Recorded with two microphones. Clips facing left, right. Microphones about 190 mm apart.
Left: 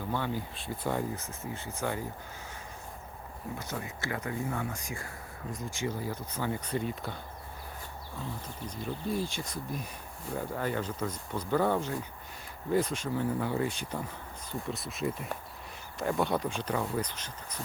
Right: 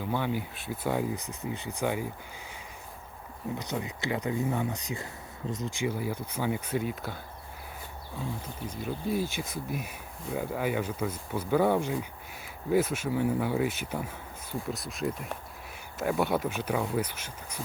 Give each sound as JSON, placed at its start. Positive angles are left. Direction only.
{"t": 0.1, "sound": "speech", "side_deg": -15}
{"t": 3.6, "sound": "speech", "side_deg": -20}
{"t": 8.4, "sound": "speech", "side_deg": -5}